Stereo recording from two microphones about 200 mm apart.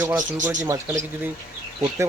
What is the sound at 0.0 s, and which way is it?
A man's voice, 15° right (ahead or behind).